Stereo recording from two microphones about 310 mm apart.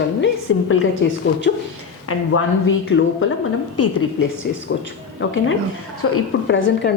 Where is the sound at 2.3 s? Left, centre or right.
Left.